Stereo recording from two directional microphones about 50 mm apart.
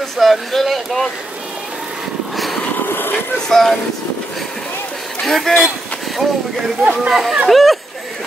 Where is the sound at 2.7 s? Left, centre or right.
Left.